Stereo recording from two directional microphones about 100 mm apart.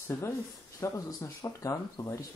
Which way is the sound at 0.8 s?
35° left (ahead or behind).